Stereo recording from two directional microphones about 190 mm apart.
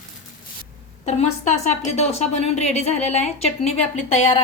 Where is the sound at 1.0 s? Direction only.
40° left (ahead or behind).